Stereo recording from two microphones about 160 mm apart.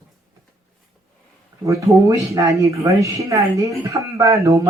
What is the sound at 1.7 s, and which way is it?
A woman's voice, 20° right (ahead or behind).